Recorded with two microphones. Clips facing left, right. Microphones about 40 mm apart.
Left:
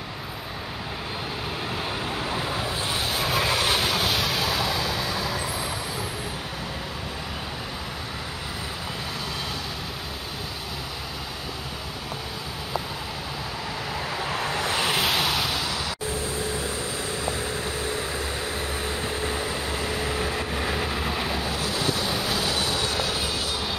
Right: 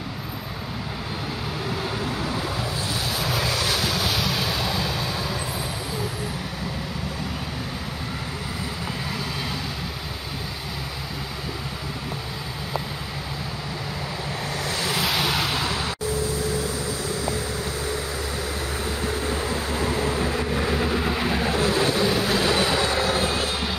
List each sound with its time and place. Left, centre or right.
1.8 s vehicle: centre
14.3 s vehicle: left
15.0 s vehicle: centre
15.3 s vehicle: centre
16.1 s vehicle: left
19.7 s vehicle: right
20.5 s vehicle: centre
21.4 s vehicle: right
22.1 s train: centre
22.4 s train: right